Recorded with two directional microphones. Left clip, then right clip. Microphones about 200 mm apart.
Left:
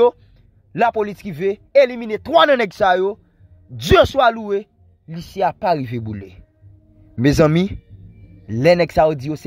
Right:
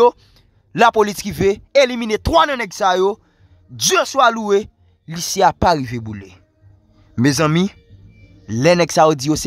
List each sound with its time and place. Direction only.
0.7 s speech: 20° right (ahead or behind)
2.3 s speech: 10° left (ahead or behind)
2.7 s speech: 5° right (ahead or behind)
4.4 s speech: 25° right (ahead or behind)